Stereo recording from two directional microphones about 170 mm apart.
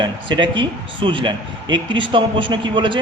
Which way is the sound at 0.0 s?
25° right (ahead or behind).